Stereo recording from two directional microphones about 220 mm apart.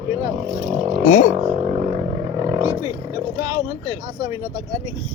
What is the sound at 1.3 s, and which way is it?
Roaring cats, 25° right (ahead or behind).